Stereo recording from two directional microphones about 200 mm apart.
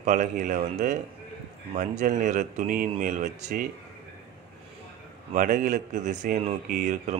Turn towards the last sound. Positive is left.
turn(degrees=-40)  # may be behind; listen again after turning